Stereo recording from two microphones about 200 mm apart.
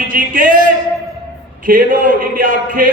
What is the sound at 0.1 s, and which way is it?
Speech, 45° right (ahead or behind).